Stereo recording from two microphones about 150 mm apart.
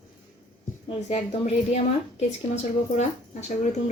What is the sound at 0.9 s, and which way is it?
A woman's voice, 45° left (ahead or behind).